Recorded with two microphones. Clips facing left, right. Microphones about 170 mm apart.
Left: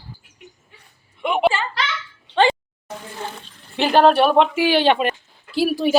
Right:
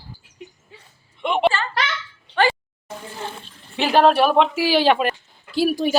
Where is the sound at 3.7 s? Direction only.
Centre (ahead or behind).